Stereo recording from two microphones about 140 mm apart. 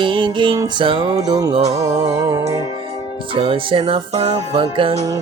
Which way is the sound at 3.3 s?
40° right (ahead or behind).